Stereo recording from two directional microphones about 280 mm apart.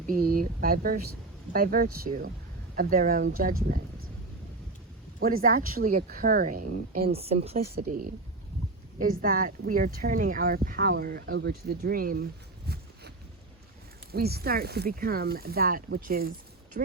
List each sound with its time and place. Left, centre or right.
0.1 s speech: right
5.2 s speech: right
12.6 s a sound: right
14.1 s speech: right